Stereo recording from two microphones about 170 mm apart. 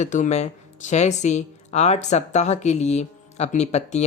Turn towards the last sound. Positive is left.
turn(degrees=40)  # may be behind; listen again after turning